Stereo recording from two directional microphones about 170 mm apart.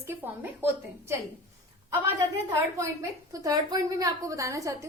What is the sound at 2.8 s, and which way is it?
A woman's voice, 20° right (ahead or behind).